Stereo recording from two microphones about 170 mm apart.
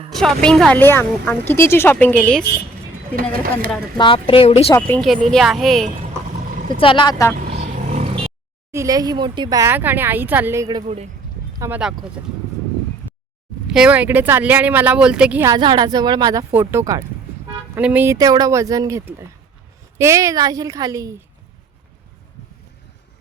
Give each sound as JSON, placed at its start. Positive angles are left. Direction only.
{"t": 0.1, "sound": "a woman's voice", "side_deg": 0}
{"t": 3.2, "sound": "speech", "side_deg": -60}
{"t": 3.9, "sound": "a woman's voice", "side_deg": 30}
{"t": 4.8, "sound": "a woman's voice", "side_deg": 5}
{"t": 6.7, "sound": "speech", "side_deg": 30}
{"t": 7.6, "sound": "vehicle", "side_deg": -40}
{"t": 8.7, "sound": "speech", "side_deg": -20}
{"t": 10.8, "sound": "speech", "side_deg": -35}
{"t": 11.6, "sound": "a woman's voice", "side_deg": -5}
{"t": 13.7, "sound": "speech", "side_deg": -5}
{"t": 15.5, "sound": "a woman's voice", "side_deg": -25}
{"t": 16.5, "sound": "a woman's voice", "side_deg": -15}